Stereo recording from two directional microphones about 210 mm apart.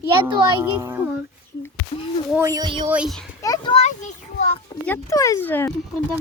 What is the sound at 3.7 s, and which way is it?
Children playing, 30° left (ahead or behind).